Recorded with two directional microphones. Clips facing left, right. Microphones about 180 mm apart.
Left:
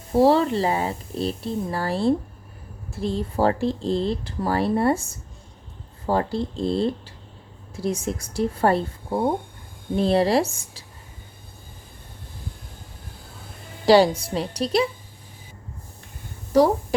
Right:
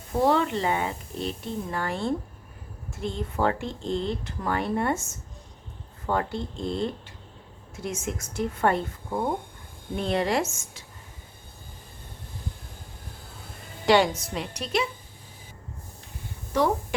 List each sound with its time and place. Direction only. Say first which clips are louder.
0.1 s speech: left 5 dB; 35° left (ahead or behind)
13.8 s speech: left 5 dB; 35° left (ahead or behind)
16.5 s a woman's voice: left 7 dB; 35° left (ahead or behind)